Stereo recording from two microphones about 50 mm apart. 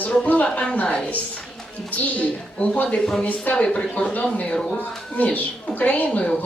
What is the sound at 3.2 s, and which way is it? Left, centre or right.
Speech, left.